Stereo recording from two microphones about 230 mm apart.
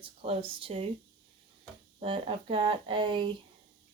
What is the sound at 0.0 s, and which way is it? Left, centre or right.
Speech, right.